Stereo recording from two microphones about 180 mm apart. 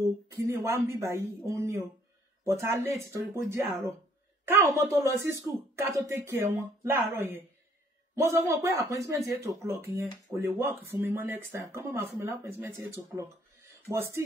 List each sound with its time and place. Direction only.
0.0 s speech: 15° right (ahead or behind)